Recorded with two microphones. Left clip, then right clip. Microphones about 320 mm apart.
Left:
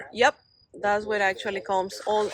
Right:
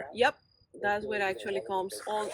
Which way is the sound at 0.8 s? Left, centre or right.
Left.